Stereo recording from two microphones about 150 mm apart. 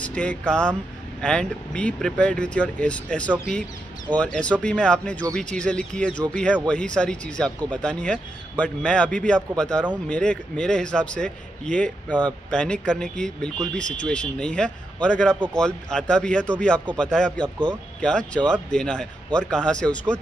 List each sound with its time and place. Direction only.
0.0 s speech: 10° left (ahead or behind)